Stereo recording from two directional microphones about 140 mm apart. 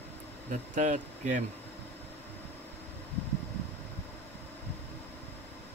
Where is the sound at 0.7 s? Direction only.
65° right (ahead or behind).